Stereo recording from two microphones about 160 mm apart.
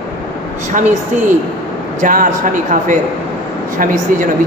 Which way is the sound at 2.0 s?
55° right (ahead or behind).